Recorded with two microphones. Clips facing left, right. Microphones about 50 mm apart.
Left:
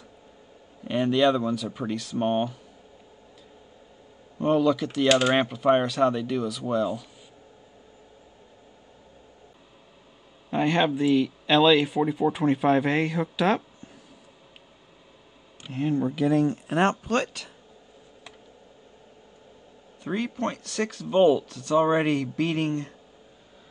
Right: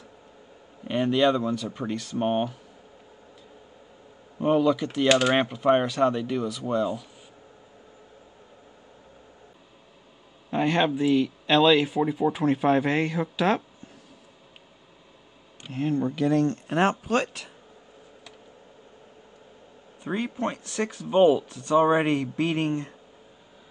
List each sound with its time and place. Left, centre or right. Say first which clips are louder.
0.8 s speech: even; centre
4.4 s speech: even; centre
10.5 s speech: even; centre
15.6 s speech: even; centre
20.0 s speech: even; centre